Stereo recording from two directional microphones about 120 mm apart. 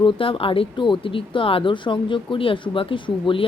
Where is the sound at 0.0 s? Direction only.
45° left (ahead or behind).